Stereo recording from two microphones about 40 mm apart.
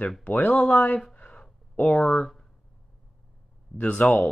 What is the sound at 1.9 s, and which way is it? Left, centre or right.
Speech, left.